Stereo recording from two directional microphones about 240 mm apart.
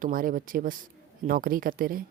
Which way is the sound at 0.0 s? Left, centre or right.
Right.